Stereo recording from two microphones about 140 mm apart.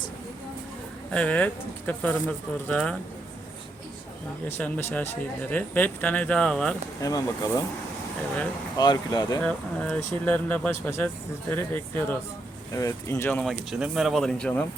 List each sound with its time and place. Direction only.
1.1 s speech: 10° left (ahead or behind)
4.4 s speech: 15° left (ahead or behind)
7.0 s speech: 25° left (ahead or behind)
8.8 s speech: 30° left (ahead or behind)
9.4 s speech: 10° left (ahead or behind)
13.4 s speech: centre (ahead or behind)